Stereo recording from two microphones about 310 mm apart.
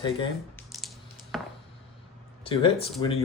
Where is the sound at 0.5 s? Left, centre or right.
Centre.